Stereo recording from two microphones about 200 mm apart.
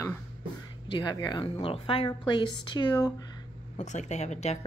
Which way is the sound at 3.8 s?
35° left (ahead or behind).